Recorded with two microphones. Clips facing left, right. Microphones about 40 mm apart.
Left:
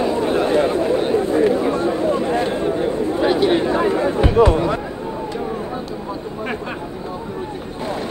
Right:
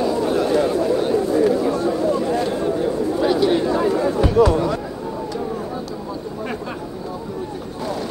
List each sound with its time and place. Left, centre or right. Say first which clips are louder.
0.0 s chatter: left 1 dB; left